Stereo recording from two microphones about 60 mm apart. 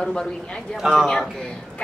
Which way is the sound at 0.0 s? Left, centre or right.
Centre.